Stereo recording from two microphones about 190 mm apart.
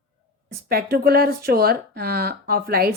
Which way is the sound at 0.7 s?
55° right (ahead or behind).